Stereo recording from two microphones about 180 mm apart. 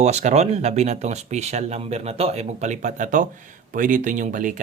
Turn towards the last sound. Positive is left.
turn(degrees=-45)  # may be behind; listen again after turning